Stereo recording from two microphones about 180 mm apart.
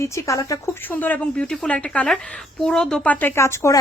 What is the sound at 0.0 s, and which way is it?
Speech, 15° left (ahead or behind).